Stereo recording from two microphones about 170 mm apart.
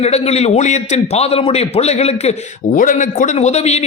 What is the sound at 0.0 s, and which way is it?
A man's voice, 40° left (ahead or behind).